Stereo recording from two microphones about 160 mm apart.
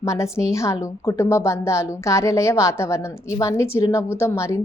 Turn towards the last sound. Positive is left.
turn(degrees=20)  # may be behind; listen again after turning